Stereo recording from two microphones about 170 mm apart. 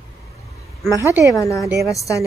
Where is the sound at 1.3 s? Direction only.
20° left (ahead or behind).